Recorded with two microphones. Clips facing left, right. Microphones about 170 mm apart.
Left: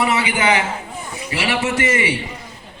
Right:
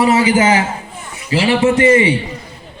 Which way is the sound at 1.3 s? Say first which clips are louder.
Right 8 dB; 25° right (ahead or behind).